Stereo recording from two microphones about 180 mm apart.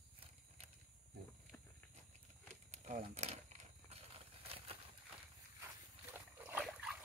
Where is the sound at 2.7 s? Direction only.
40° right (ahead or behind).